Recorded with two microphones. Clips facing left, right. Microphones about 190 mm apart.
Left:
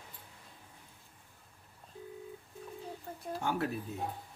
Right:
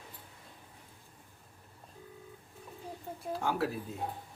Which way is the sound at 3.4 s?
Centre (ahead or behind).